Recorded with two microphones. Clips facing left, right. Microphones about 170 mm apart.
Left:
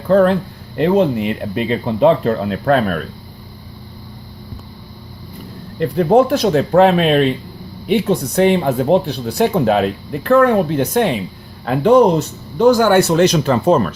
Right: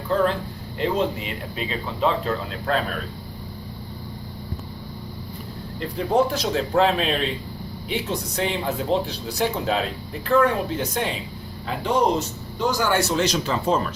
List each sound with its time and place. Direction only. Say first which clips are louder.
0.1 s speech: left 10 dB; 60° left (ahead or behind)
5.8 s a man's voice: left 9 dB; 60° left (ahead or behind)